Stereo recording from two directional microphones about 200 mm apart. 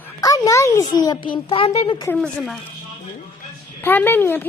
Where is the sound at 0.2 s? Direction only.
20° left (ahead or behind).